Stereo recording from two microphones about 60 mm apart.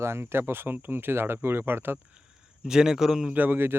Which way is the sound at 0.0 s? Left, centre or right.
Right.